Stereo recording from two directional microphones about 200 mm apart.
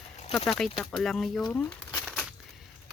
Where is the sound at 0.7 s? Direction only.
Centre (ahead or behind).